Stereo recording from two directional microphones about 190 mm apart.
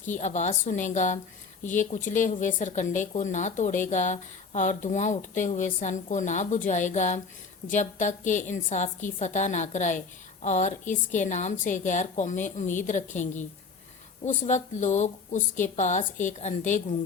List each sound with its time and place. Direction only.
0.2 s a woman's voice: 40° left (ahead or behind)